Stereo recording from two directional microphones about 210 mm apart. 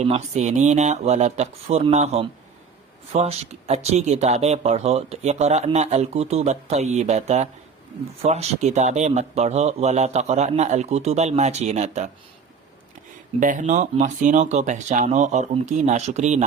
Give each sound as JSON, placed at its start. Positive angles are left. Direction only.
{"t": 0.0, "sound": "speech", "side_deg": -30}
{"t": 13.4, "sound": "speech", "side_deg": -35}